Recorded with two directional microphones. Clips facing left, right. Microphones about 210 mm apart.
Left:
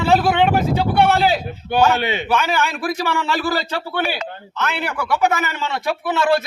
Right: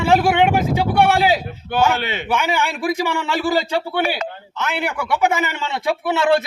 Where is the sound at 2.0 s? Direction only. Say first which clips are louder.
Left 3 dB; 15° left (ahead or behind).